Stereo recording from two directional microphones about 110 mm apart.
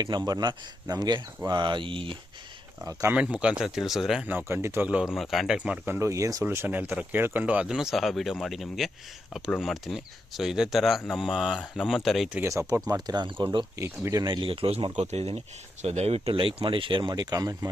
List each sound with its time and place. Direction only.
0.0 s speech: 40° right (ahead or behind)
3.1 s speech: 10° right (ahead or behind)
4.3 s speech: 20° right (ahead or behind)
4.9 s speech: 10° right (ahead or behind)
5.9 s speech: 25° right (ahead or behind)
6.4 s speech: 20° right (ahead or behind); by 12.3 s centre (ahead or behind)
12.5 s speech: 30° right (ahead or behind)
13.1 s speech: 40° right (ahead or behind)
13.7 s speech: 25° right (ahead or behind)
14.3 s speech: 50° right (ahead or behind)
14.9 s speech: 85° right; by 17.7 s 35° right (ahead or behind)